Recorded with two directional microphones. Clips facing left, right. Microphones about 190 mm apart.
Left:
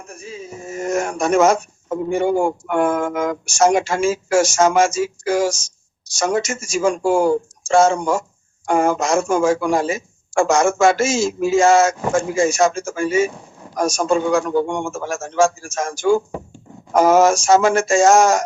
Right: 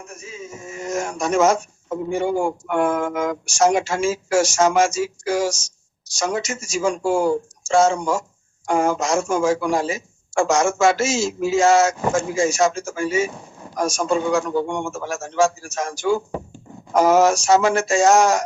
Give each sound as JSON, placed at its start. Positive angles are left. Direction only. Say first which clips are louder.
{"t": 0.2, "sound": "a man's voice", "louder": "left 5 dB", "side_deg": 30}
{"t": 0.9, "sound": "speech", "louder": "left 4 dB", "side_deg": 60}